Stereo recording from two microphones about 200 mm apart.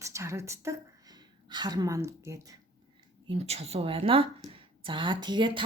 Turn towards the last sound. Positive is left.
turn(degrees=-25)  # may be behind; listen again after turning